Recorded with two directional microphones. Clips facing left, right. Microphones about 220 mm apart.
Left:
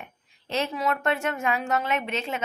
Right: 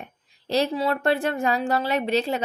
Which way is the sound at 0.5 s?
35° right (ahead or behind).